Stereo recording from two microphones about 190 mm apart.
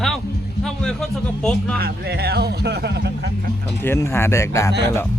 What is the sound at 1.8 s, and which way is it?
Speech, 55° right (ahead or behind).